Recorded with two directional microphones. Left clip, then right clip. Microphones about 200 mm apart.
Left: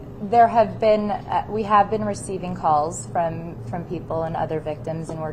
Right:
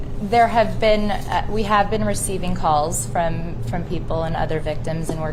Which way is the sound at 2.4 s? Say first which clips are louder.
Right 1 dB; 20° right (ahead or behind).